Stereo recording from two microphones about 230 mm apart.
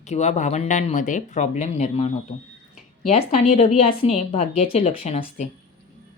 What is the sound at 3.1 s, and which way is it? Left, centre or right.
Speech, left.